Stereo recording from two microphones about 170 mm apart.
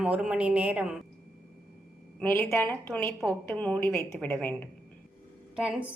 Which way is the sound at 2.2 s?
10° left (ahead or behind).